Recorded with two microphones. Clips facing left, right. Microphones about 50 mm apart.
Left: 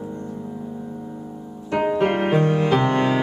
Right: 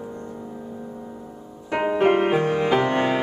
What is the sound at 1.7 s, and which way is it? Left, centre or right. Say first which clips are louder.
Music: right 1 dB; centre.